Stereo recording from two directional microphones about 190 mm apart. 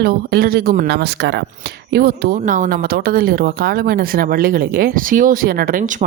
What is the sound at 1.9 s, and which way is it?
Speech, 55° right (ahead or behind).